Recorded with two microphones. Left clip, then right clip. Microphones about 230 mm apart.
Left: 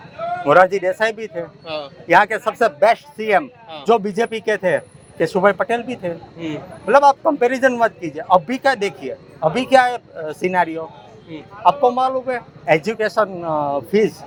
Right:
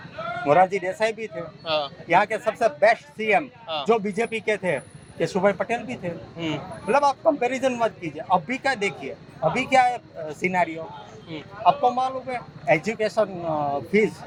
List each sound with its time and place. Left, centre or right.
0.4 s speech: left
1.6 s speech: right
2.0 s a man's voice: left
11.9 s a man's voice: left